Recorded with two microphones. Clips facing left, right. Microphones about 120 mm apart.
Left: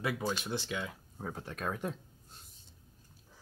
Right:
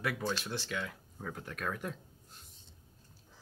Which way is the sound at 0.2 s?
15° left (ahead or behind).